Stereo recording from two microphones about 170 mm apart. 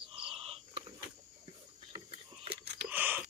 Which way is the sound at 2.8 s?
10° right (ahead or behind).